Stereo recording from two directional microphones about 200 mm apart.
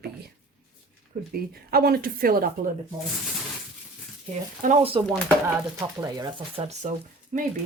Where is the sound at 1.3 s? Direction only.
50° right (ahead or behind).